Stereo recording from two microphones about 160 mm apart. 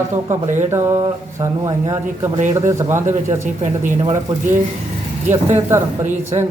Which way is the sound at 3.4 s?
50° right (ahead or behind).